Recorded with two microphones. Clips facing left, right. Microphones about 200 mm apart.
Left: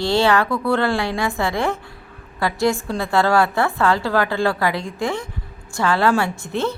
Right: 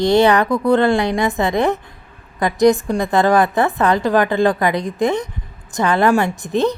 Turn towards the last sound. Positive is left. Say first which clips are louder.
# right 5 dB
turn(degrees=-15)  # may be behind; listen again after turning